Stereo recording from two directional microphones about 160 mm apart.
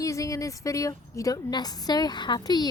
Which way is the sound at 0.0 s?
20° left (ahead or behind).